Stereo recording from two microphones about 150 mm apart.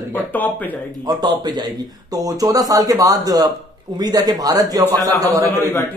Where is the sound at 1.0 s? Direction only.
30° right (ahead or behind).